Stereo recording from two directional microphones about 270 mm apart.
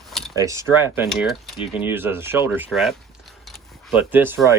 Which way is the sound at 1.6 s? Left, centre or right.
Centre.